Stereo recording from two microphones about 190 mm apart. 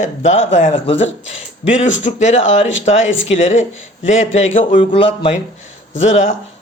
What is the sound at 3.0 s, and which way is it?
Speech, 85° left.